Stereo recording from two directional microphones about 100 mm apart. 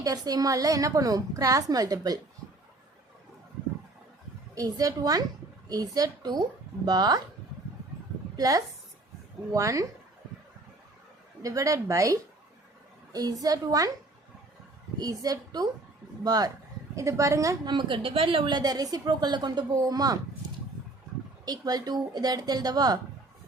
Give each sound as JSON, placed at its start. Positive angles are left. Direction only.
{"t": 0.0, "sound": "a woman's voice", "side_deg": -40}
{"t": 4.5, "sound": "a woman's voice", "side_deg": -35}
{"t": 8.4, "sound": "a woman's voice", "side_deg": -35}
{"t": 11.4, "sound": "a woman's voice", "side_deg": -35}
{"t": 14.9, "sound": "a woman's voice", "side_deg": -40}
{"t": 17.7, "sound": "a woman's voice", "side_deg": -55}
{"t": 21.4, "sound": "a woman's voice", "side_deg": -40}